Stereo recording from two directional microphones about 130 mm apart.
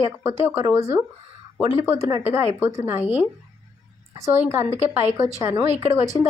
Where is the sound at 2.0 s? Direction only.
20° right (ahead or behind).